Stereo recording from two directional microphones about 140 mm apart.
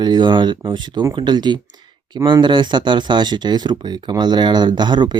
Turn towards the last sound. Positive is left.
turn(degrees=-30)  # may be behind; listen again after turning